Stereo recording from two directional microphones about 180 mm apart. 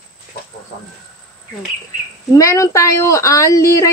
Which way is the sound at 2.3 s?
15° left (ahead or behind).